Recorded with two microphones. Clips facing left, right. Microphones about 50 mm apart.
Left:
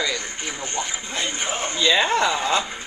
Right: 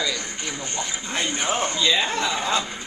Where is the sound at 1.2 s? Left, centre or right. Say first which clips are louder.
Right 1 dB; centre.